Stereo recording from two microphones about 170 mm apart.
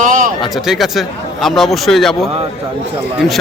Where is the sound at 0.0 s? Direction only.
50° right (ahead or behind).